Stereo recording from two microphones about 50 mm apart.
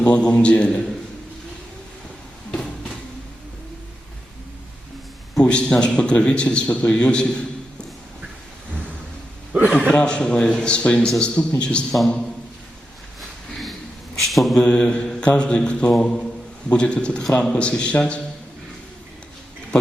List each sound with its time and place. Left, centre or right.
0.0 s a man's voice: left
2.5 s a sound: centre
5.4 s a man's voice: centre
9.9 s a man's voice: centre
11.9 s a man's voice: centre
14.2 s mantra: centre
14.6 s a man's voice: left